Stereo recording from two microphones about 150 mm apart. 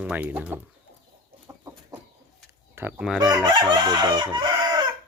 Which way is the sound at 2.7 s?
10° right (ahead or behind).